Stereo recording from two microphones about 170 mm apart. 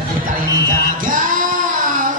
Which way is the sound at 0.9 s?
50° right (ahead or behind).